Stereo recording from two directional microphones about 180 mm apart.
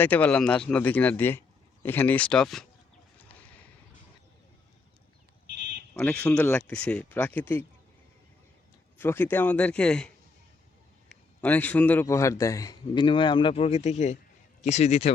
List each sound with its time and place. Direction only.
0.0 s speech: 10° left (ahead or behind)
5.9 s speech: 5° left (ahead or behind)
9.0 s speech: 10° left (ahead or behind)
11.1 s a man's voice: 10° left (ahead or behind); by 15.1 s 35° left (ahead or behind)